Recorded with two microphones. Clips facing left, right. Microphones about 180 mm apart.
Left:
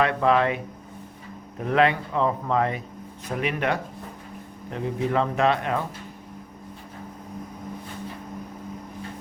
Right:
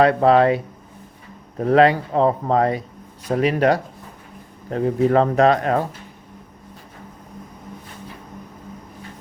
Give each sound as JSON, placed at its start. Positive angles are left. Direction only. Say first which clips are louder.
{"t": 0.0, "sound": "speech", "louder": "right 7 dB", "side_deg": -35}